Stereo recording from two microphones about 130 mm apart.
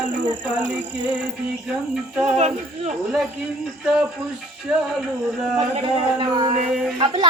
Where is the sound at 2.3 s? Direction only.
60° right (ahead or behind).